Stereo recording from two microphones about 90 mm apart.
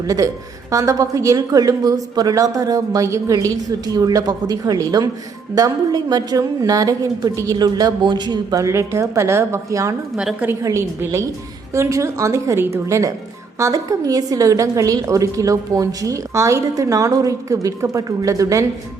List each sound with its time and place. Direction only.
0.7 s a woman's voice: 35° right (ahead or behind)
8.6 s a woman's voice: 35° right (ahead or behind)